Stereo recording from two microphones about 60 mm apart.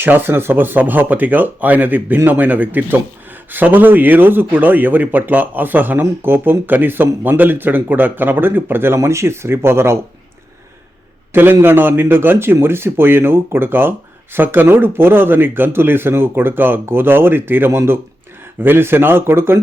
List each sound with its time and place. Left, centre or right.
0.0 s speech: right
9.0 s speech: right
11.6 s speech: right